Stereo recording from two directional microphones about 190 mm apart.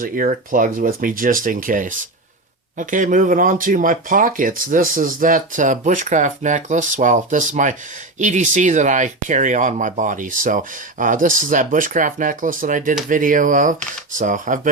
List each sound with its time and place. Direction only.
0.0 s speech: 45° right (ahead or behind)